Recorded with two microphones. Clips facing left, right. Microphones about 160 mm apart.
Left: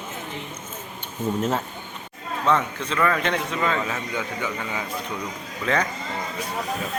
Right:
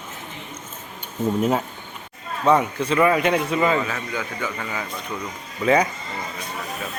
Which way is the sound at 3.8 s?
25° left (ahead or behind).